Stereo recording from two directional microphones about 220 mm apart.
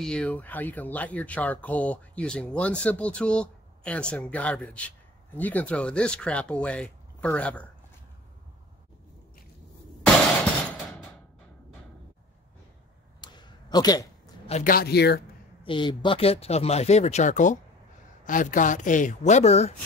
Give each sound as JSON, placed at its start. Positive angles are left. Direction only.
{"t": 0.0, "sound": "speech", "side_deg": 5}
{"t": 13.2, "sound": "a sound", "side_deg": 20}
{"t": 14.5, "sound": "speech", "side_deg": 40}
{"t": 15.6, "sound": "a woman's voice", "side_deg": 20}